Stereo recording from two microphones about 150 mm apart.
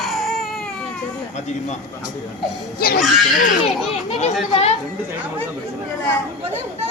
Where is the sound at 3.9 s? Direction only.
45° left (ahead or behind).